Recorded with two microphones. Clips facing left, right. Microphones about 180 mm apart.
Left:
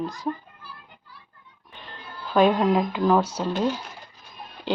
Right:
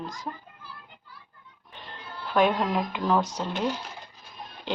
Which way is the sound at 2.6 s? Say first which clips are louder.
Left 6 dB; 5° left (ahead or behind).